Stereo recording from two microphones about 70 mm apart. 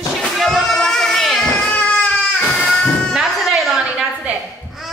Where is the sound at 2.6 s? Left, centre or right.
Centre.